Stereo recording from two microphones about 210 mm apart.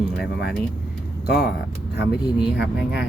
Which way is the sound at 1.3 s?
50° left (ahead or behind).